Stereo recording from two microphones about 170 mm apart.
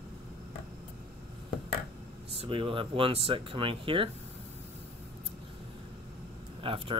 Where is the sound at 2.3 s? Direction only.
30° right (ahead or behind).